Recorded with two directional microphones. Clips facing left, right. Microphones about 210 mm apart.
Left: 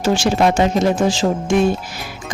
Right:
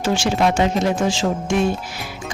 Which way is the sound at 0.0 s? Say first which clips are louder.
Left 3 dB; 40° left (ahead or behind).